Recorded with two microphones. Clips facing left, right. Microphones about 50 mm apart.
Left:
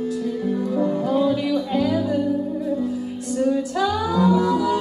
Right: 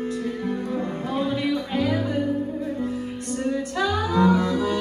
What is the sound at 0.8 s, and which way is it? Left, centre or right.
Music, right.